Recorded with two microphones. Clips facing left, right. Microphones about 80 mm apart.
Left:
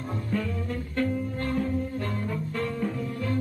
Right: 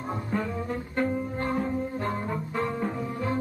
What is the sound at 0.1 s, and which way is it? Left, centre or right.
Music, right.